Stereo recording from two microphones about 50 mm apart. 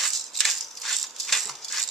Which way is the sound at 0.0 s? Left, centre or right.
Centre.